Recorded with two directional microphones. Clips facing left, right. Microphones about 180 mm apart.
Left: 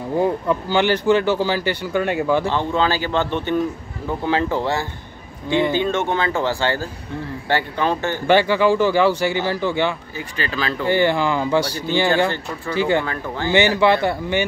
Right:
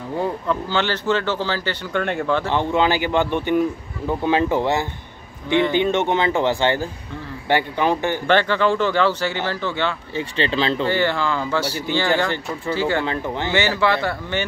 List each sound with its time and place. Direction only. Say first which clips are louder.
0.5 s speech: left 4 dB; 15° left (ahead or behind)
2.5 s speech: right 1 dB; 15° right (ahead or behind)
8.3 s speech: left 3 dB; 10° left (ahead or behind)
10.1 s speech: right 5 dB; 25° right (ahead or behind)
10.9 s speech: left 3 dB; 15° left (ahead or behind)
13.0 s speech: right 2 dB; 20° right (ahead or behind)
13.5 s speech: left 5 dB; 15° left (ahead or behind)